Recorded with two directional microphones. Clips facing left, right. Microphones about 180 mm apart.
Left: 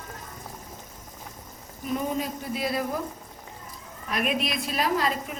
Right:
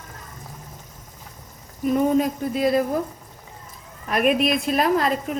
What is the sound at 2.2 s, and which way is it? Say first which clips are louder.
Speech: right 8 dB; 50° right (ahead or behind).